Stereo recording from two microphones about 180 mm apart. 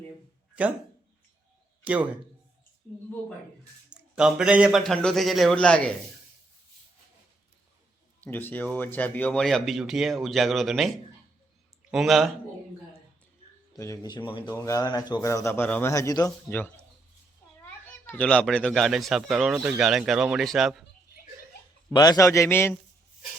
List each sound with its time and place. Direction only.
1.8 s speech: 10° right (ahead or behind)
3.8 s speech: 5° right (ahead or behind)
8.2 s speech: 10° left (ahead or behind)
13.7 s a man's voice: 15° left (ahead or behind)
17.8 s speech: 10° left (ahead or behind)
21.9 s a man's voice: 20° left (ahead or behind)